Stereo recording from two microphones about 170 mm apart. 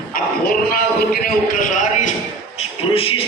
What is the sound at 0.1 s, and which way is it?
Speech, 60° left (ahead or behind).